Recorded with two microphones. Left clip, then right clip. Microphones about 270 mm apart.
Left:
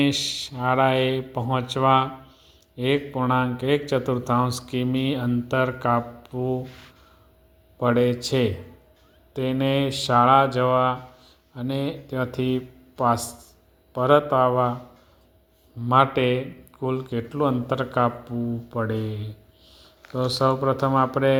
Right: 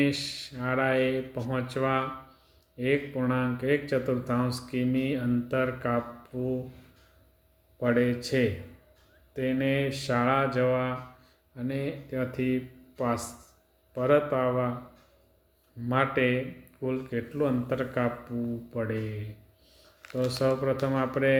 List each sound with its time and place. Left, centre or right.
0.0 s speech: left
7.8 s speech: left
15.9 s speech: left
20.1 s speech: centre